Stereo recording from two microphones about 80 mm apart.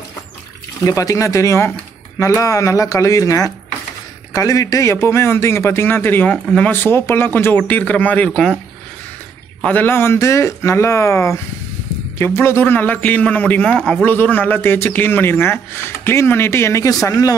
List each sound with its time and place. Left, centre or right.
0.8 s a man's voice: left; by 8.3 s centre
9.6 s a man's voice: left